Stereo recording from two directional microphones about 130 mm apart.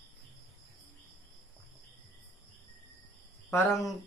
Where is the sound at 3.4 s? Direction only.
20° left (ahead or behind).